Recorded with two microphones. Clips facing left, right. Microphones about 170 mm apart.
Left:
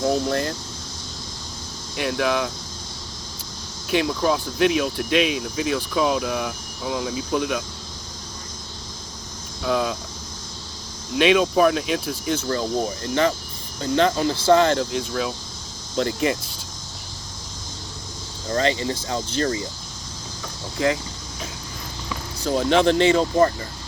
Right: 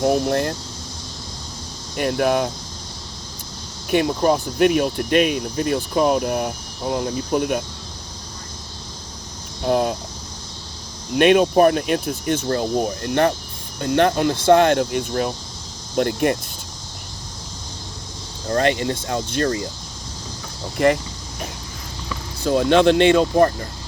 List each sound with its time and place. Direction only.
0.0 s speech: 65° right (ahead or behind)
2.0 s speech: 50° right (ahead or behind)
3.8 s speech: 55° right (ahead or behind)
9.6 s speech: 50° right (ahead or behind)
11.1 s speech: 55° right (ahead or behind)
18.4 s speech: 60° right (ahead or behind)
20.7 s speech: 65° right (ahead or behind)
22.4 s speech: 80° right